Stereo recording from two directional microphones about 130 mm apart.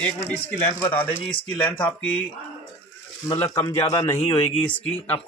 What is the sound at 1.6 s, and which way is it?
Speech, 10° left (ahead or behind).